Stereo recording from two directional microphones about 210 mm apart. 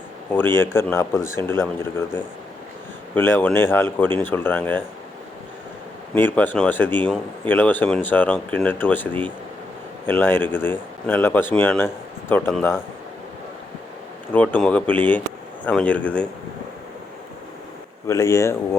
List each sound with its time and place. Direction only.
0.3 s speech: 10° left (ahead or behind)
6.1 s speech: 10° left (ahead or behind)
14.3 s speech: 5° left (ahead or behind)
18.1 s speech: 15° left (ahead or behind)